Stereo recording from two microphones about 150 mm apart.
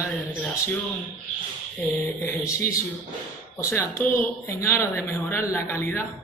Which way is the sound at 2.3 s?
20° left (ahead or behind).